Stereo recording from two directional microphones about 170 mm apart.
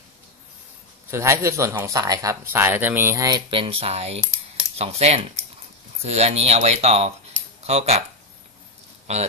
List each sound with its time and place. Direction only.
1.1 s speech: 15° right (ahead or behind); by 8.0 s 40° right (ahead or behind)
9.1 s speech: 40° right (ahead or behind)